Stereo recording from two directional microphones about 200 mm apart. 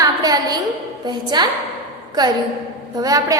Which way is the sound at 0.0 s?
20° right (ahead or behind).